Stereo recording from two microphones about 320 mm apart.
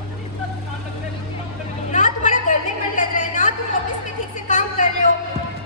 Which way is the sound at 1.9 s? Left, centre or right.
Left.